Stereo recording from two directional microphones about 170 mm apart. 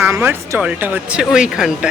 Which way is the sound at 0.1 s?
15° right (ahead or behind).